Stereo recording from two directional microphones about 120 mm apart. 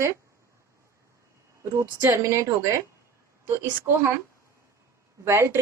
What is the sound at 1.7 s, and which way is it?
A woman's voice, 25° right (ahead or behind).